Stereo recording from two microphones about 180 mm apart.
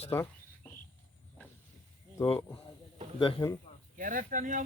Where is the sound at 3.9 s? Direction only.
50° right (ahead or behind).